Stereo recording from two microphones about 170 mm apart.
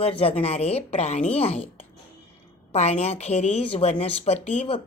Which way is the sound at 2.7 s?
40° left (ahead or behind).